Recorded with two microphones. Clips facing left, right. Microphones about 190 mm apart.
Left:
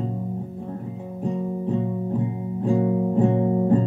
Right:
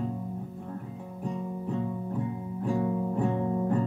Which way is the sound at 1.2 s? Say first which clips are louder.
Left 8 dB; 25° left (ahead or behind).